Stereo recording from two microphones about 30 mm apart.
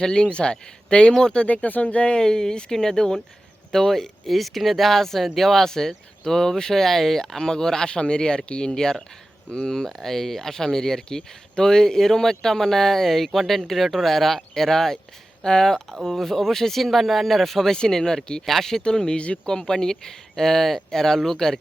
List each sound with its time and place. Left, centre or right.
0.0 s speech: left
1.5 s speech: left
2.2 s speech: left; by 5.6 s centre
5.6 s speech: centre
9.8 s speech: centre
17.7 s speech: centre
19.1 s speech: left
19.5 s speech: centre